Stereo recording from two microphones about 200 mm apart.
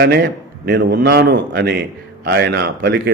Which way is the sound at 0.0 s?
55° right (ahead or behind).